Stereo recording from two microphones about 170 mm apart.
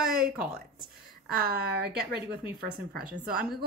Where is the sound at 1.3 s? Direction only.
65° right (ahead or behind).